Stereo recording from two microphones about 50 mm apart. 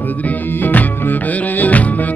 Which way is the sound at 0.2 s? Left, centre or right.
Left.